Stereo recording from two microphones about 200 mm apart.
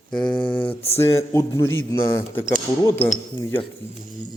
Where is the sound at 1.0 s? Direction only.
15° left (ahead or behind).